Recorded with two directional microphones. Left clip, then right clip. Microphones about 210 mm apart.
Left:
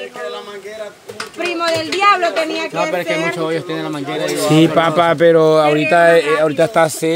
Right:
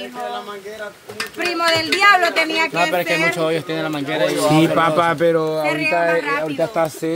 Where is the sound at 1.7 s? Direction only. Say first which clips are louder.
Even; 50° right (ahead or behind).